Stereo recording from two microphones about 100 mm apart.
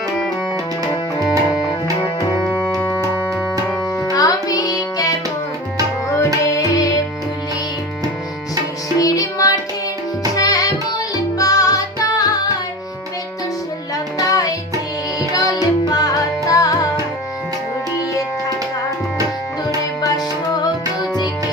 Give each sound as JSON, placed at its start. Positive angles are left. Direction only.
{"t": 1.2, "sound": "music", "side_deg": 0}
{"t": 4.1, "sound": "music", "side_deg": 35}
{"t": 9.0, "sound": "music", "side_deg": 35}
{"t": 10.3, "sound": "tabla", "side_deg": 35}
{"t": 11.3, "sound": "music", "side_deg": 35}
{"t": 14.2, "sound": "music", "side_deg": 35}
{"t": 20.0, "sound": "music", "side_deg": 40}